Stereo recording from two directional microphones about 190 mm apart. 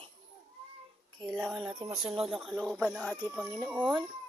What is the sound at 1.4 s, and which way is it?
Speech, centre (ahead or behind).